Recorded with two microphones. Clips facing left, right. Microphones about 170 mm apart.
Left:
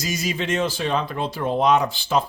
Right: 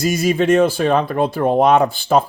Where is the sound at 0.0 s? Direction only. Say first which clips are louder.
Right 10 dB; 55° right (ahead or behind).